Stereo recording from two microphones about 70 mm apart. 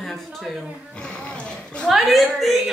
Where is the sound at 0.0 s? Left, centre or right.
Centre.